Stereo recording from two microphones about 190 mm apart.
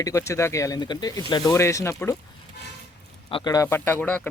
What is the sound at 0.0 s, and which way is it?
Speech, 15° left (ahead or behind).